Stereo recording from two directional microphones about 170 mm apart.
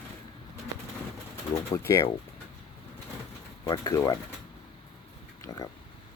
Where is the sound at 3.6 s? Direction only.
20° left (ahead or behind).